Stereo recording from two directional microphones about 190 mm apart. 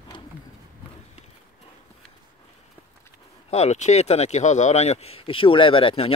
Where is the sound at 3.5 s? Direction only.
35° left (ahead or behind).